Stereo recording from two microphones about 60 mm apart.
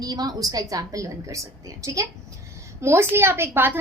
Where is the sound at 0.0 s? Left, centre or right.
Right.